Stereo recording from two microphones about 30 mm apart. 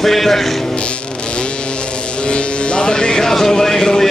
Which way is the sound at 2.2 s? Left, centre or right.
Left.